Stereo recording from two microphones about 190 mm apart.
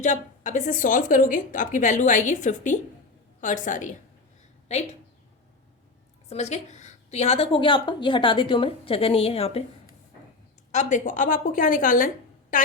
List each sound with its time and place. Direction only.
0.0 s a woman's voice: 40° left (ahead or behind)
6.2 s a woman's voice: 35° left (ahead or behind)
10.7 s speech: 40° left (ahead or behind)